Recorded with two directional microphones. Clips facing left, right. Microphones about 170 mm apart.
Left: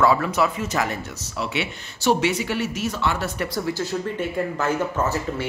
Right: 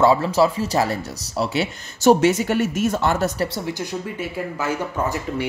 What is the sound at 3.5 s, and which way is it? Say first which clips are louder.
Speech: left 2 dB; 20° right (ahead or behind).